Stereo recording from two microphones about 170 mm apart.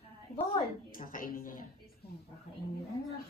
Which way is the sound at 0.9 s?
55° left (ahead or behind).